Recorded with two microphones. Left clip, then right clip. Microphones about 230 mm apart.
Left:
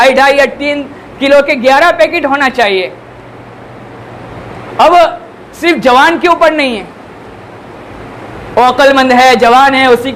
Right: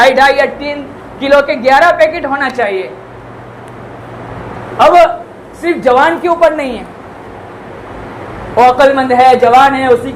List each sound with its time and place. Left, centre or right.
0.0 s a man's voice: left
4.8 s a woman's voice: left
8.5 s a woman's voice: left